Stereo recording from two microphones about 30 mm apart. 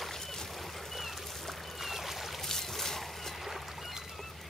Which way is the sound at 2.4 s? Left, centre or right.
Centre.